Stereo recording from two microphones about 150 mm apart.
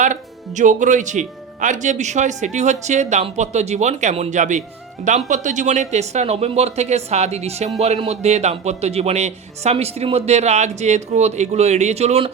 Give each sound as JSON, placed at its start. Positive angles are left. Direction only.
{"t": 0.0, "sound": "a man's voice", "side_deg": -55}